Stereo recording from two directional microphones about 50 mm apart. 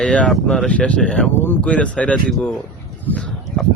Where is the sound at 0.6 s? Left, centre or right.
Left.